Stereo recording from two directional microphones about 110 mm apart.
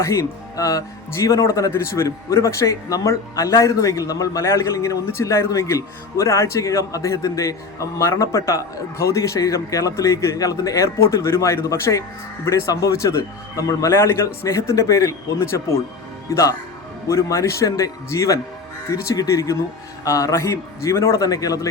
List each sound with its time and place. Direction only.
0.0 s speech: 30° left (ahead or behind)